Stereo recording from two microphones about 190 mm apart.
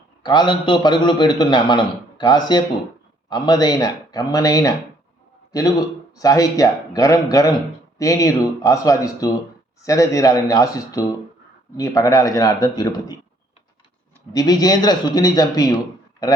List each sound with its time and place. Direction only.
0.2 s a man's voice: 25° left (ahead or behind)
14.3 s a man's voice: 20° left (ahead or behind)